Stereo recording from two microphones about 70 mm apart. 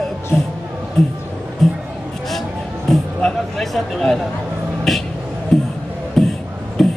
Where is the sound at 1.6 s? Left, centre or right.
Centre.